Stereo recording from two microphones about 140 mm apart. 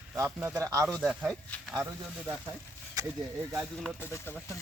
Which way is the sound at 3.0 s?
25° right (ahead or behind).